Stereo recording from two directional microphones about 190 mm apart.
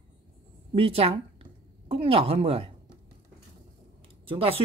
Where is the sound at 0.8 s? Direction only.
30° right (ahead or behind).